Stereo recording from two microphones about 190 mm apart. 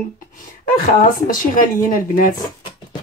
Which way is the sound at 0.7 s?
45° left (ahead or behind).